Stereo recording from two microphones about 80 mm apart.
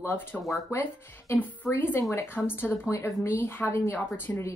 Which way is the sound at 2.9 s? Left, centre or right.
Left.